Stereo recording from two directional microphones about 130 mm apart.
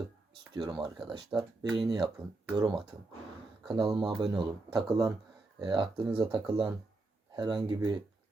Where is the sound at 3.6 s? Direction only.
35° right (ahead or behind).